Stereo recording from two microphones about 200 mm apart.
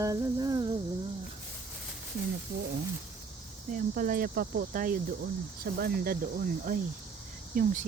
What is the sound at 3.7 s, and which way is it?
Speech, 45° right (ahead or behind).